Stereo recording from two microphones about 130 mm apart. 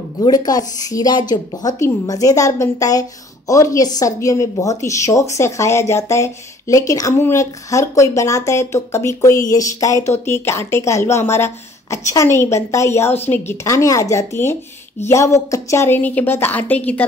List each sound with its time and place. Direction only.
0.2 s a woman's voice: 30° left (ahead or behind); by 17.0 s 10° left (ahead or behind)